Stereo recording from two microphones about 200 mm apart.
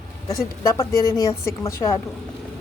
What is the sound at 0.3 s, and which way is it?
Speech, 15° left (ahead or behind).